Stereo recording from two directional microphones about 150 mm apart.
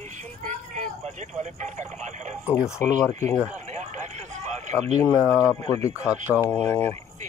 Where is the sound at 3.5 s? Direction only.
50° right (ahead or behind).